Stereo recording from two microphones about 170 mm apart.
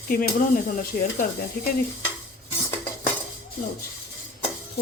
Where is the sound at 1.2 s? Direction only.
60° left (ahead or behind).